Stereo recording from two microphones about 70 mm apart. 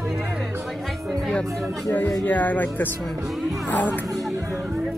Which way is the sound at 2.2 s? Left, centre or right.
Left.